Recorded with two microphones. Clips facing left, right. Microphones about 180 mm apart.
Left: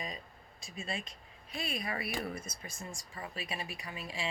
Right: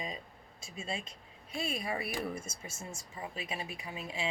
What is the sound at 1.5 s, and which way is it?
Speech, 25° right (ahead or behind).